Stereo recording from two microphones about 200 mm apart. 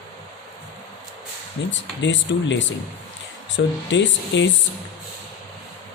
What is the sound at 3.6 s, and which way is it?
Speech, 65° left (ahead or behind).